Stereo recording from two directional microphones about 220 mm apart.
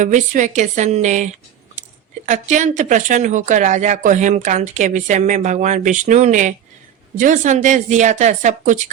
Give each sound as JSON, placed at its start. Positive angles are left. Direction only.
{"t": 0.0, "sound": "speech", "side_deg": -35}